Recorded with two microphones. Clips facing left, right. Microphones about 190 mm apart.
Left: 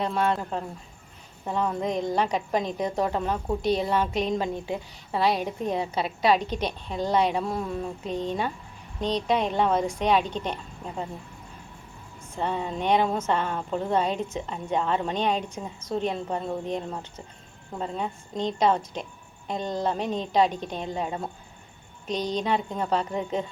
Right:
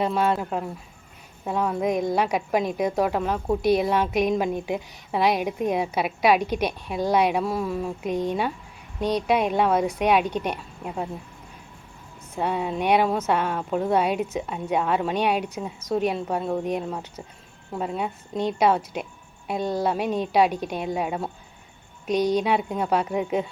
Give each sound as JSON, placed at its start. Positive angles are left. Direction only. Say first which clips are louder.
{"t": 0.0, "sound": "a woman's voice", "louder": "right 3 dB", "side_deg": -5}
{"t": 12.4, "sound": "a woman's voice", "louder": "right 3 dB", "side_deg": -10}